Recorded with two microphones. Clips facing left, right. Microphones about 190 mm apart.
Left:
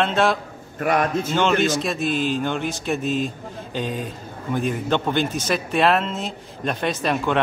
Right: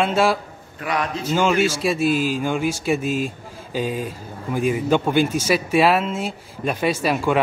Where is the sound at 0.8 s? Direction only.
50° left (ahead or behind).